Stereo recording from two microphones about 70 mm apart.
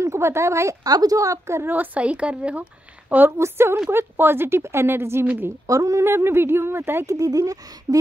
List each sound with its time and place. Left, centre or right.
0.0 s a woman's voice: right
0.9 s a woman's voice: right
1.6 s a woman's voice: right
3.3 s a woman's voice: right
5.2 s a woman's voice: right
5.7 s a woman's voice: right
7.1 s speech: right